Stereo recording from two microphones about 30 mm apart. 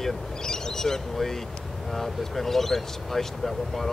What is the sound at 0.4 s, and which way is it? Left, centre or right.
Bird, centre.